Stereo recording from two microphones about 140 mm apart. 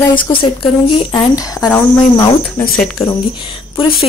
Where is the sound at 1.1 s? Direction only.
25° left (ahead or behind).